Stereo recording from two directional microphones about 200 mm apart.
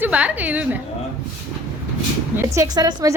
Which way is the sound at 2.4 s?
15° right (ahead or behind).